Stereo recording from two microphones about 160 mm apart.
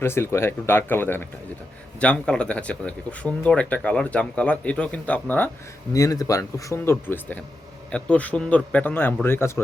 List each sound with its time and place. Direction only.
0.0 s speech: 15° left (ahead or behind)
5.9 s speech: 20° left (ahead or behind)